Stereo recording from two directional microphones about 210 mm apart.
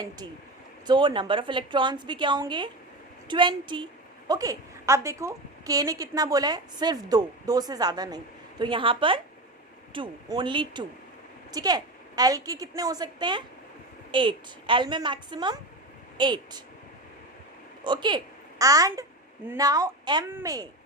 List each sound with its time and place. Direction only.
0.9 s a woman's voice: 25° right (ahead or behind)
17.8 s a woman's voice: 20° right (ahead or behind)